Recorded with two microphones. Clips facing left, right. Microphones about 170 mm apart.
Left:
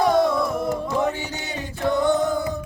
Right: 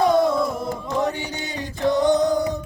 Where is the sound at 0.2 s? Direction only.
20° right (ahead or behind).